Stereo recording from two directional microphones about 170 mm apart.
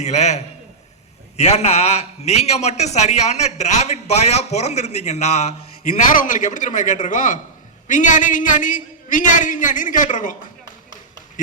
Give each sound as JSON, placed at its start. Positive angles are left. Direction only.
{"t": 0.0, "sound": "a man's voice", "side_deg": 40}